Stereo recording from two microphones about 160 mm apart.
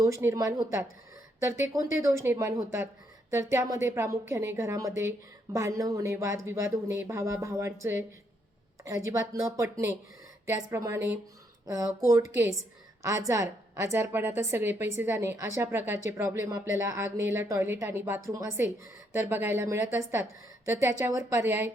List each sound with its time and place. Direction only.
0.0 s a woman's voice: 15° right (ahead or behind)